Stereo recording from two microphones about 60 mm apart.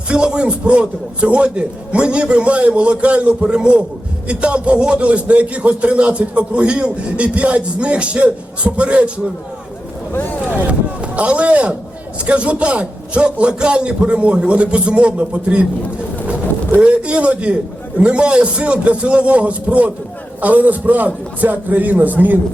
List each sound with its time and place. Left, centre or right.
0.1 s speech: centre
10.5 s speech: right
16.7 s speech: centre